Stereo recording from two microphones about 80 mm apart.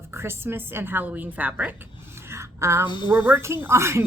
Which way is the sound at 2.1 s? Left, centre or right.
Right.